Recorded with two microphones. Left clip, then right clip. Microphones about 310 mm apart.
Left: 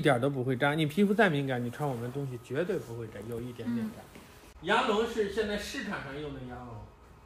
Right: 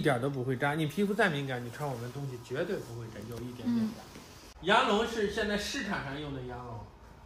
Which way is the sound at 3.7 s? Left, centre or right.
Centre.